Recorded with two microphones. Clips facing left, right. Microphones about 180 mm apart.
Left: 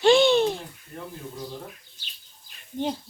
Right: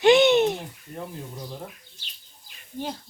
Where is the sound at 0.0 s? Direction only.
20° right (ahead or behind).